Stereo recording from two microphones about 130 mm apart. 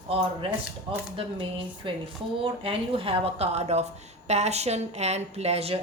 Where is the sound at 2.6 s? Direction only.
45° right (ahead or behind).